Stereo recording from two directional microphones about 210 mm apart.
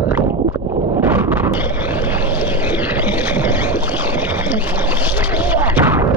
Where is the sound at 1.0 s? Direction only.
10° right (ahead or behind).